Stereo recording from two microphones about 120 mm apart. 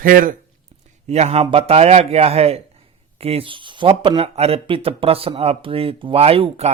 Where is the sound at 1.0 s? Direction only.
65° right (ahead or behind); by 3.9 s 45° right (ahead or behind).